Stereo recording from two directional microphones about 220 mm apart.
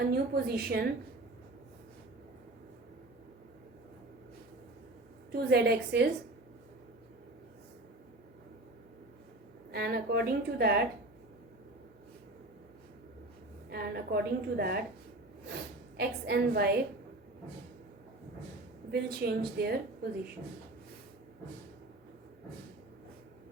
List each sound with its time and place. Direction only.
0.1 s a woman's voice: 45° right (ahead or behind)
5.3 s a woman's voice: 45° right (ahead or behind)
9.7 s a woman's voice: 45° right (ahead or behind)
13.7 s a woman's voice: 45° right (ahead or behind)
16.0 s a woman's voice: 45° right (ahead or behind)
18.9 s a woman's voice: 45° right (ahead or behind)